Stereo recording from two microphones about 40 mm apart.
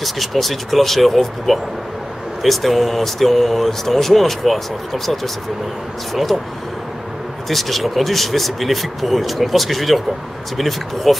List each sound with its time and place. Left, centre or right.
0.0 s speech: centre
7.4 s speech: centre
11.1 s speech: centre